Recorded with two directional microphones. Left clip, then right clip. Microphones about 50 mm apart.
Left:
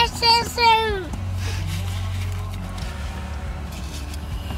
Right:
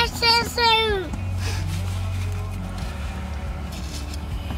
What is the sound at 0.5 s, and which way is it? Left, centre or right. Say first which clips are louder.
Speech: left 2 dB; centre.